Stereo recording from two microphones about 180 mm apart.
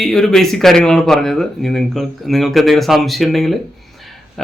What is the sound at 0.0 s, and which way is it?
Speech, 5° left (ahead or behind).